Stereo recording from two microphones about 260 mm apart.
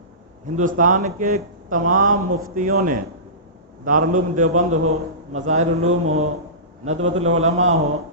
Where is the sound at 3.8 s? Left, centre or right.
Right.